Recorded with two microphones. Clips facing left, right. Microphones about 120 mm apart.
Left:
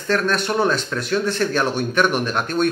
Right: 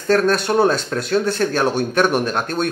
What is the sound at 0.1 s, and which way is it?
A man's voice, 45° right (ahead or behind).